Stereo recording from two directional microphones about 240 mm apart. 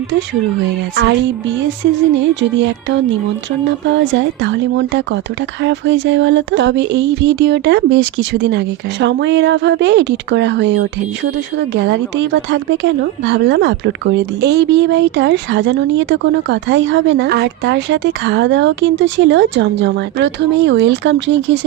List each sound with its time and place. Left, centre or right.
0.9 s a woman's voice: right
4.4 s a woman's voice: right